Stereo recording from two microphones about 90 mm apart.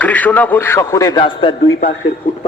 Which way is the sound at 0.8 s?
35° left (ahead or behind).